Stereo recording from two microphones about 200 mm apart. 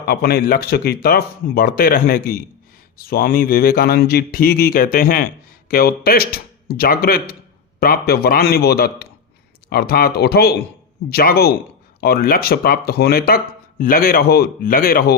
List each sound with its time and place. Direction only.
0.1 s speech: 50° left (ahead or behind)